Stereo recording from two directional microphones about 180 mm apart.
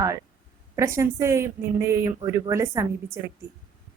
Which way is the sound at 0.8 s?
15° right (ahead or behind).